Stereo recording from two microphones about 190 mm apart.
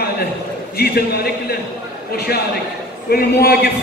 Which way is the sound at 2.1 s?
55° left (ahead or behind).